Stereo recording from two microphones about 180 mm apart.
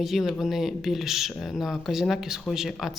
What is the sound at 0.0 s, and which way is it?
Speech, centre (ahead or behind).